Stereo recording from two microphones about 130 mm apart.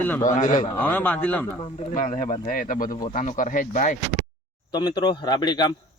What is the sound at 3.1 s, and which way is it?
Speech, 70° left (ahead or behind).